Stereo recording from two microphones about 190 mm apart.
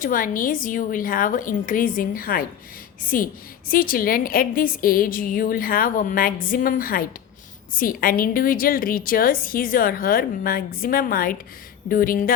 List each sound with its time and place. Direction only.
0.0 s a woman's voice: 45° left (ahead or behind)